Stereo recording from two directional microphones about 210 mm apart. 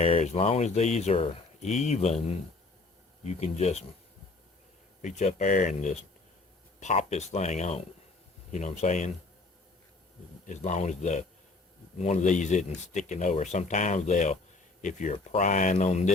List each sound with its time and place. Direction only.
0.0 s speech: 30° left (ahead or behind)
5.0 s speech: 30° left (ahead or behind)
10.4 s speech: 35° left (ahead or behind)